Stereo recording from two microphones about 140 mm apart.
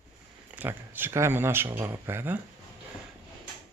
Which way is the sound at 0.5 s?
15° right (ahead or behind).